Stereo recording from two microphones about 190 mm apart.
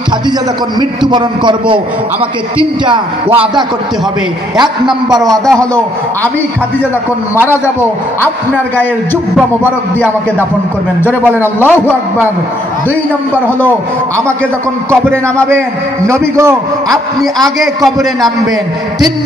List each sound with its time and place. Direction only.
0.7 s a man's voice: 25° right (ahead or behind)
2.8 s a man's voice: 25° right (ahead or behind)
5.3 s a man's voice: centre (ahead or behind)
11.1 s a man's voice: 10° right (ahead or behind)
13.7 s a man's voice: 15° right (ahead or behind)
16.1 s a man's voice: 15° right (ahead or behind)
16.9 s a man's voice: centre (ahead or behind)